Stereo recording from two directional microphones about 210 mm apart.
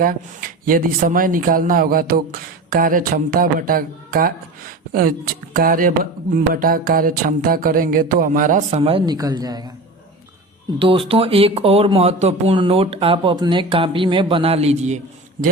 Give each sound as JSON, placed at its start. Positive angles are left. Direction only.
{"t": 0.0, "sound": "speech", "side_deg": -40}
{"t": 6.5, "sound": "a sound", "side_deg": -40}
{"t": 10.8, "sound": "speech", "side_deg": -25}